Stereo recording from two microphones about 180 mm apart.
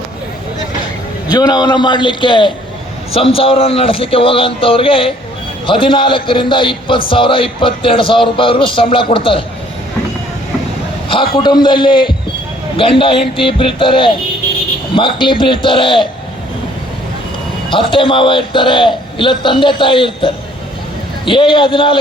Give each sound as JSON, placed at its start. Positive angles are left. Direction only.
{"t": 1.3, "sound": "a man's voice", "side_deg": 20}
{"t": 11.3, "sound": "a man's voice", "side_deg": 25}
{"t": 17.7, "sound": "a man's voice", "side_deg": 30}